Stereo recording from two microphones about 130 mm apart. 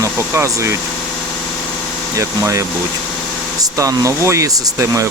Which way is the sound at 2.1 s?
25° right (ahead or behind).